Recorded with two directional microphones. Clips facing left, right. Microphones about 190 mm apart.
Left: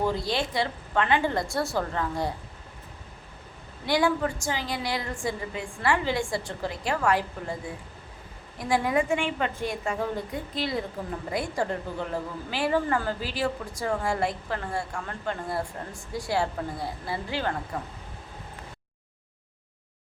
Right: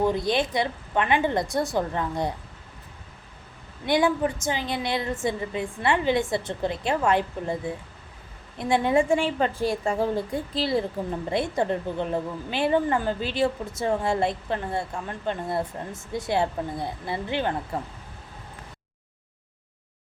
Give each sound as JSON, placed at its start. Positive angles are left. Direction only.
{"t": 0.0, "sound": "a woman's voice", "side_deg": -20}
{"t": 3.8, "sound": "a woman's voice", "side_deg": -20}